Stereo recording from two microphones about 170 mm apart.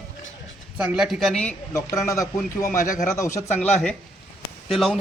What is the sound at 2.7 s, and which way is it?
Speech, 50° left (ahead or behind).